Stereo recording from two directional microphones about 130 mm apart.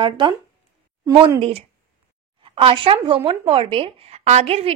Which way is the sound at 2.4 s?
45° right (ahead or behind).